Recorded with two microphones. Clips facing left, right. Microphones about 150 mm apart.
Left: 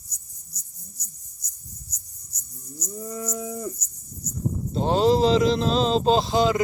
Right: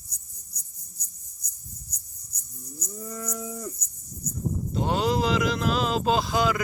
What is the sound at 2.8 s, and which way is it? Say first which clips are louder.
Cattle: left 4 dB; 15° left (ahead or behind).